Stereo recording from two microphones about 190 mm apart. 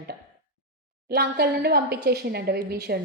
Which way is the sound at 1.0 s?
55° right (ahead or behind).